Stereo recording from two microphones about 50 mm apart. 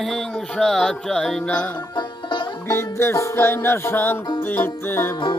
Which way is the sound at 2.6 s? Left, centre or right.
Left.